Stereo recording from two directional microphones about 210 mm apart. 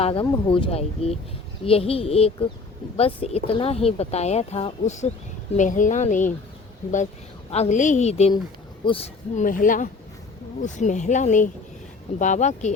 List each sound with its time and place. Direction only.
0.0 s speech: 25° left (ahead or behind)
7.5 s speech: 30° left (ahead or behind)